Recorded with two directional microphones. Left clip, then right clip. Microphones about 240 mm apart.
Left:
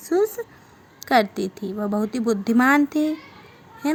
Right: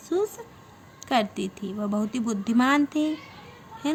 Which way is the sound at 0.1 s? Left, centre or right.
Left.